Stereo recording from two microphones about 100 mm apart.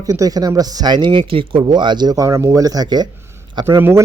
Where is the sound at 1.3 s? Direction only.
60° right (ahead or behind); by 3.1 s 40° right (ahead or behind).